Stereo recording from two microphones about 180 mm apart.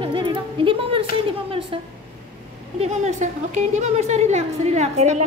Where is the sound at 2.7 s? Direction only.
40° right (ahead or behind).